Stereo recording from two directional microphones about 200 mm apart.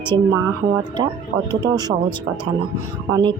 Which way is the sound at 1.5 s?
20° right (ahead or behind).